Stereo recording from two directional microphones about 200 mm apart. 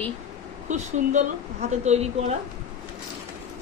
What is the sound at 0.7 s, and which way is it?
Speech, 35° right (ahead or behind).